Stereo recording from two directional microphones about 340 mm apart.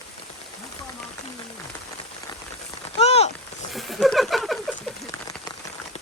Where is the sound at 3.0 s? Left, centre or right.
Centre.